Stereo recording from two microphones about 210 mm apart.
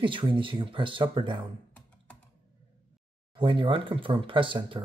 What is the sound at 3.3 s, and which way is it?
Speech, 25° right (ahead or behind).